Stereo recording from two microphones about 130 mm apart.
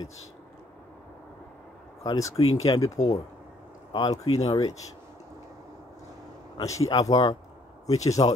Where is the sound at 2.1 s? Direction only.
25° left (ahead or behind).